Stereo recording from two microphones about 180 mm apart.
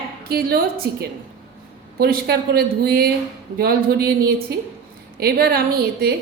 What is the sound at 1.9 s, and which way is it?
A woman's voice, 60° right (ahead or behind).